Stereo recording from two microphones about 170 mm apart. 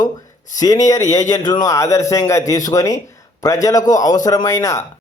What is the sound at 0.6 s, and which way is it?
A man's voice, 20° left (ahead or behind).